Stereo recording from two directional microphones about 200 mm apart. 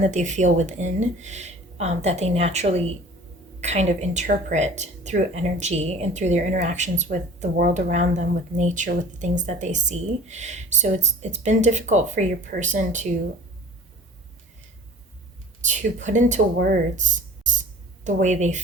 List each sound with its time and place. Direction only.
0.0 s speech: 35° right (ahead or behind)
15.6 s speech: 40° right (ahead or behind)